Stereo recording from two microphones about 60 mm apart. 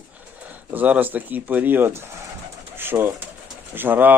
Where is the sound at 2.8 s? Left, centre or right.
Right.